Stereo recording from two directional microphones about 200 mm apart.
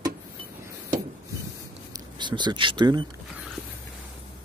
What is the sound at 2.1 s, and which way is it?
Speech, 20° right (ahead or behind).